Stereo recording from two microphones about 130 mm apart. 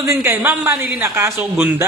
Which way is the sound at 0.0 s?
20° right (ahead or behind).